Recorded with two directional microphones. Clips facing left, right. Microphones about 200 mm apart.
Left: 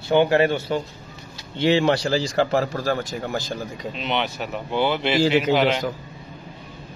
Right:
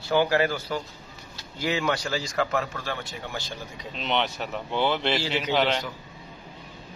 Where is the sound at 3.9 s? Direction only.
5° left (ahead or behind).